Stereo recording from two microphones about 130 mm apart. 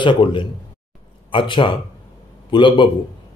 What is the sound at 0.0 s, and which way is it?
A man's voice, 40° left (ahead or behind).